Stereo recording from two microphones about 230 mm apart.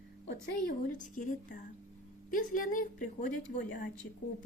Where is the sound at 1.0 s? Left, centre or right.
Left.